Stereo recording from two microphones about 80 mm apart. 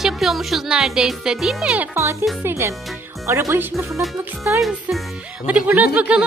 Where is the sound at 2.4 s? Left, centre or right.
Right.